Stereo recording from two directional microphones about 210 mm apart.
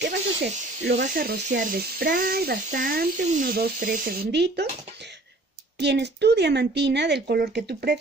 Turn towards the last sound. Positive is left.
turn(degrees=-50)  # may be behind; listen again after turning